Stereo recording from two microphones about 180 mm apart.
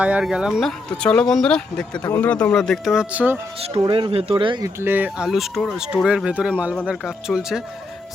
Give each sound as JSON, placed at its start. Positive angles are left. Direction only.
{"t": 0.0, "sound": "speech", "side_deg": -5}
{"t": 3.7, "sound": "speech", "side_deg": -20}
{"t": 4.8, "sound": "speech", "side_deg": -10}